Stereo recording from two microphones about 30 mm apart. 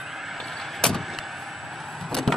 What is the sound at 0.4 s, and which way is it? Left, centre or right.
Vehicle, centre.